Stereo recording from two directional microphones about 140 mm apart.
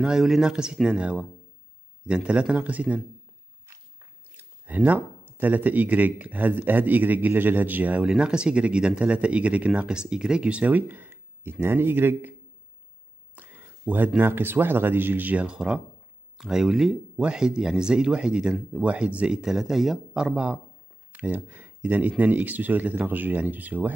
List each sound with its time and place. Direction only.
0.0 s speech: 5° right (ahead or behind)
4.3 s speech: 10° right (ahead or behind)
13.4 s speech: 10° right (ahead or behind)